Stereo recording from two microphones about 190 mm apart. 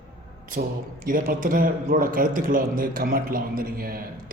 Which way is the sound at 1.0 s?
45° right (ahead or behind).